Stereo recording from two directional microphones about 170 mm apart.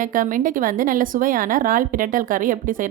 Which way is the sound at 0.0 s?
55° right (ahead or behind).